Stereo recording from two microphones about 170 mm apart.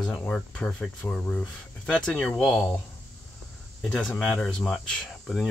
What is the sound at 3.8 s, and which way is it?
Speech, 5° left (ahead or behind).